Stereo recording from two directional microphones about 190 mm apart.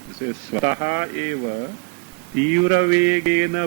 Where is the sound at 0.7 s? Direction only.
15° right (ahead or behind).